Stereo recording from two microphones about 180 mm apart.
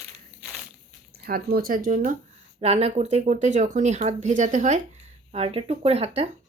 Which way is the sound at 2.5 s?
35° right (ahead or behind).